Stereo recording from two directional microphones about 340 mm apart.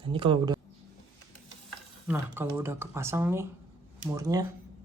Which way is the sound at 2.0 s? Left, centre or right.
Centre.